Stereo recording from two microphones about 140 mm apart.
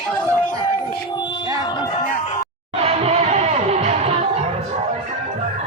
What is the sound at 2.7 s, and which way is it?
Music, 50° right (ahead or behind).